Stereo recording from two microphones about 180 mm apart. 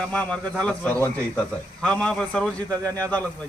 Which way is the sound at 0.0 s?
5° left (ahead or behind).